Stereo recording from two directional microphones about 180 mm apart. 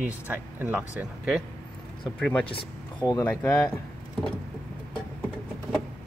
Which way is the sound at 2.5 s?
25° left (ahead or behind).